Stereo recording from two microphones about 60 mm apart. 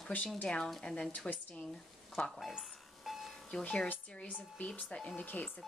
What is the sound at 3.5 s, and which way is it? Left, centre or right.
Speech, centre.